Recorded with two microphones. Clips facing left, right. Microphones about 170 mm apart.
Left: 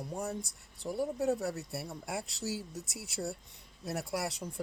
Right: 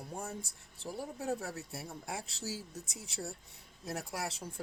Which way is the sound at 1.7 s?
70° left (ahead or behind).